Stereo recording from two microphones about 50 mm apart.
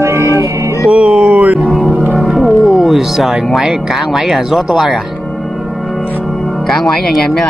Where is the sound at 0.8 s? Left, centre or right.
Centre.